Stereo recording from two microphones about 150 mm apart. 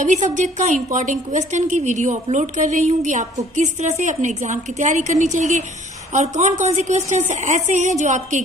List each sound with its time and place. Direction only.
0.0 s a woman's voice: 55° right (ahead or behind)